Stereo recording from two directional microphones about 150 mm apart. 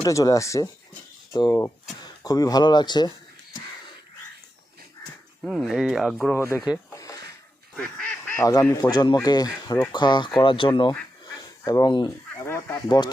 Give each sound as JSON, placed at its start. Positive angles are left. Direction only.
{"t": 0.0, "sound": "speech", "side_deg": 20}
{"t": 5.4, "sound": "speech", "side_deg": -5}
{"t": 6.3, "sound": "speech", "side_deg": 20}
{"t": 7.8, "sound": "duck", "side_deg": 5}
{"t": 8.4, "sound": "speech", "side_deg": 20}
{"t": 11.3, "sound": "goose", "side_deg": 25}
{"t": 12.5, "sound": "honk", "side_deg": 15}